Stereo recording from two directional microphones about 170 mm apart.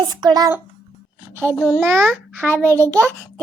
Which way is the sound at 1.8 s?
10° right (ahead or behind).